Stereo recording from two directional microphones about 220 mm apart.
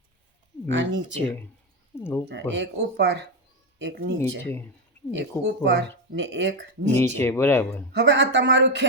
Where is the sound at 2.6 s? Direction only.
50° right (ahead or behind).